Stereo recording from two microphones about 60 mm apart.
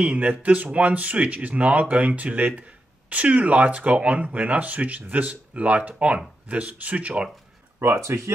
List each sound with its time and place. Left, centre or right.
0.0 s speech: right
7.8 s speech: right